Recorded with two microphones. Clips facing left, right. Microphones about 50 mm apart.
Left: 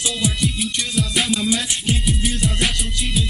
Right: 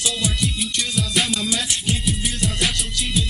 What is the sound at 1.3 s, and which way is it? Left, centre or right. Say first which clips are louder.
Music: left 3 dB; centre.